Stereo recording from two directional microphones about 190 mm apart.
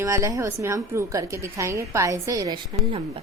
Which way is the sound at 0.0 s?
15° right (ahead or behind).